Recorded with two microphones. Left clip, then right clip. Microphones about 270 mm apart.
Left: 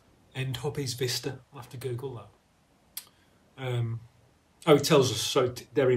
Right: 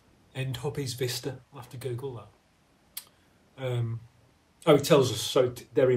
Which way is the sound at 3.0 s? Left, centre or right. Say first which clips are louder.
Even; centre.